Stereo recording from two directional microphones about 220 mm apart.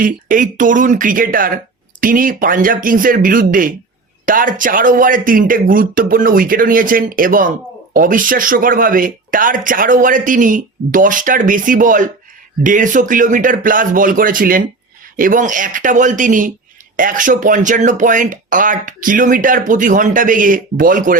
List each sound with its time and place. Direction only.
0.0 s speech: 35° right (ahead or behind)